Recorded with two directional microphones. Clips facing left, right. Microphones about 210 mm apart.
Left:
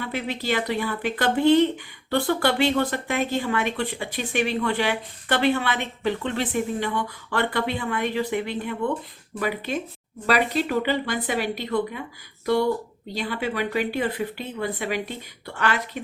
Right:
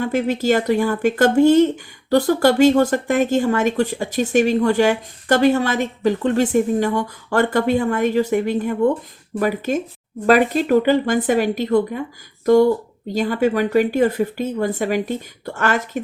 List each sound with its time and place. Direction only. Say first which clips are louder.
0.0 s speech: right 10 dB; 45° right (ahead or behind)
13.1 s speech: right 9 dB; 45° right (ahead or behind)